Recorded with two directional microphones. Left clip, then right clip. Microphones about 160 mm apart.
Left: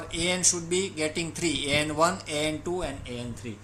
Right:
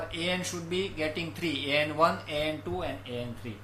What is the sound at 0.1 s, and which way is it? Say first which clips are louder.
Speech: left 9 dB; 50° left (ahead or behind).